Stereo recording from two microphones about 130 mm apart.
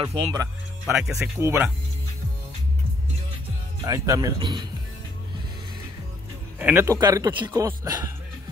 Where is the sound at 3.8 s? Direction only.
25° right (ahead or behind).